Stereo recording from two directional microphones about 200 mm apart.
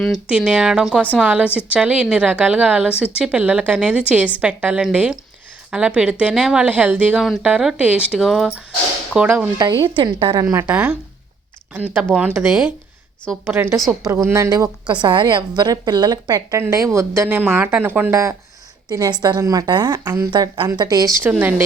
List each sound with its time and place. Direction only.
0.0 s a woman's voice: centre (ahead or behind); by 10.4 s 25° right (ahead or behind)
10.5 s a woman's voice: 10° right (ahead or behind)
14.0 s a woman's voice: 15° right (ahead or behind)
21.2 s a woman's voice: 5° right (ahead or behind)